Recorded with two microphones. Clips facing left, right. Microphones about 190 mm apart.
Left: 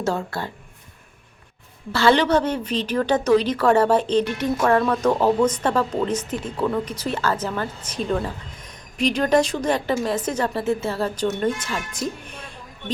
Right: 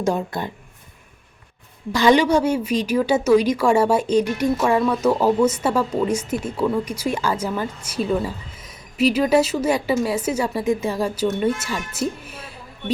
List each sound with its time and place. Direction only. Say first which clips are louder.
0.0 s a woman's voice: right 3 dB; 15° right (ahead or behind)
1.9 s a woman's voice: right 2 dB; 15° right (ahead or behind)